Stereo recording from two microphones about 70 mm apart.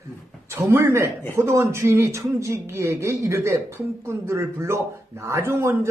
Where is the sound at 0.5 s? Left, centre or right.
Right.